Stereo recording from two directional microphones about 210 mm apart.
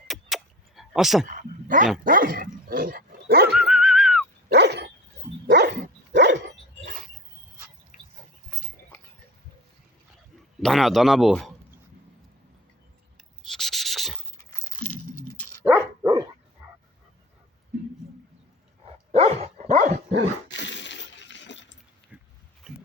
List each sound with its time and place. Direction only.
0.1 s a sound: centre (ahead or behind)
1.3 s bow-wow: 40° right (ahead or behind)
2.0 s dog: 40° right (ahead or behind)
3.5 s whistling: centre (ahead or behind)
4.4 s dog: 55° right (ahead or behind)
7.9 s vehicle: 35° left (ahead or behind)
10.6 s speech: centre (ahead or behind)
13.5 s a sound: centre (ahead or behind)
14.6 s dog: 10° left (ahead or behind)
15.6 s dog: 15° right (ahead or behind)
19.1 s dog: 30° right (ahead or behind)
20.5 s breaking: 60° left (ahead or behind)
22.1 s a sound: 5° right (ahead or behind)